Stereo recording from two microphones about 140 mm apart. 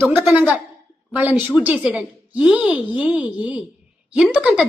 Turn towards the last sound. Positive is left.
turn(degrees=-5)  # may be behind; listen again after turning